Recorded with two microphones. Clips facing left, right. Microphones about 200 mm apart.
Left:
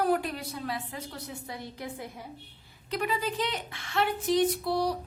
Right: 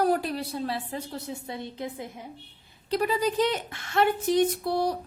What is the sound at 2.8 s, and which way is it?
A woman's voice, 35° right (ahead or behind).